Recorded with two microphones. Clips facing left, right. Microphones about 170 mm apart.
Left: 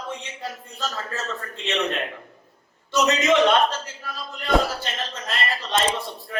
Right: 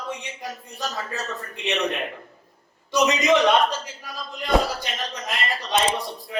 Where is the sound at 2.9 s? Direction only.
15° right (ahead or behind).